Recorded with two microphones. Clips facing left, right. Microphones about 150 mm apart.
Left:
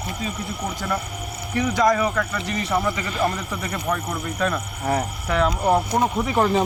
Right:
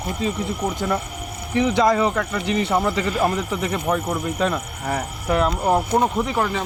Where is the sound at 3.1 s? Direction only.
15° right (ahead or behind).